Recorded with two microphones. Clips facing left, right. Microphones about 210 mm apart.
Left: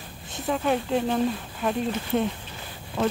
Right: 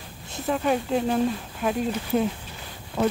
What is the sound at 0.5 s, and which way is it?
Speech, centre (ahead or behind).